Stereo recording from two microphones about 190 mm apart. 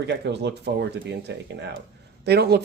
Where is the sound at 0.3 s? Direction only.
65° right (ahead or behind).